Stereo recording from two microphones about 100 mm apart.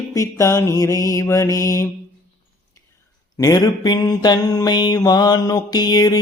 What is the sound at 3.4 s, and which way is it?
Mantra, 40° left (ahead or behind).